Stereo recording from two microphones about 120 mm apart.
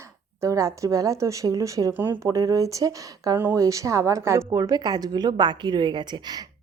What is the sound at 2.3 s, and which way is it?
A woman's voice, 30° right (ahead or behind).